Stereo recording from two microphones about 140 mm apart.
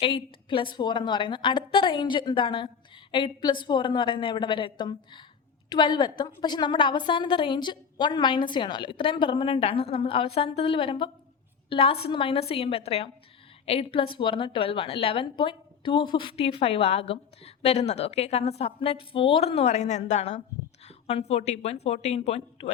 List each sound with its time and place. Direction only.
0.0 s a woman's voice: 40° left (ahead or behind)